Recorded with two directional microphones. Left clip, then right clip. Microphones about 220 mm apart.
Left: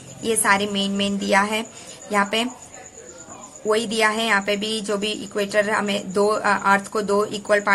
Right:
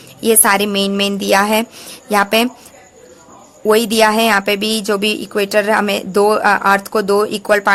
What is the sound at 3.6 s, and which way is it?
Speech, 50° right (ahead or behind).